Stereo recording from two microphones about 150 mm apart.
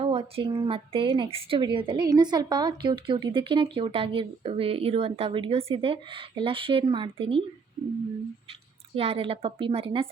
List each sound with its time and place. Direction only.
0.0 s a woman's voice: 40° right (ahead or behind)
9.0 s a woman's voice: 40° right (ahead or behind)